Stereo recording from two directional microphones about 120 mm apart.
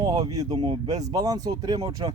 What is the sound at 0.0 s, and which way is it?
A man's voice, 35° right (ahead or behind).